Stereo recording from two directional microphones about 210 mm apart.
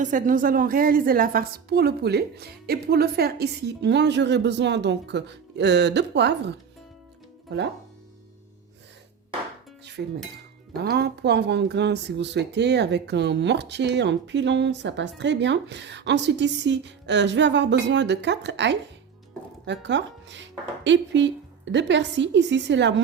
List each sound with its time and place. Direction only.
0.0 s a woman's voice: 35° right (ahead or behind); by 6.6 s 55° right (ahead or behind)
10.8 s speech: 50° right (ahead or behind)